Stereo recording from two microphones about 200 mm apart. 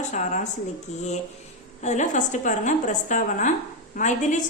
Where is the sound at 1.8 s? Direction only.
35° left (ahead or behind).